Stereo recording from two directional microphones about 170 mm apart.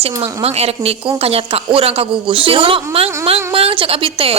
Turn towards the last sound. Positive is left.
turn(degrees=-35)  # may be behind; listen again after turning